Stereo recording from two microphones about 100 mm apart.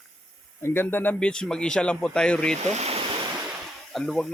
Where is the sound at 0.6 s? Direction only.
20° left (ahead or behind).